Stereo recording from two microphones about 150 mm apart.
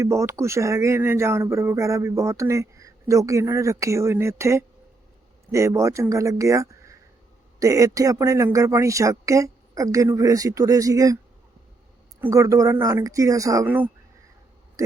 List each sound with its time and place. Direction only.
0.0 s speech: 20° right (ahead or behind)
12.2 s speech: 20° right (ahead or behind)